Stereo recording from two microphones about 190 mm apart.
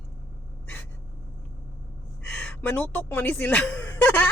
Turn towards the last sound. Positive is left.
turn(degrees=10)  # may be behind; listen again after turning